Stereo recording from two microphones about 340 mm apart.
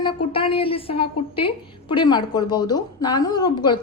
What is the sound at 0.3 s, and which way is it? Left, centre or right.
Speech, centre.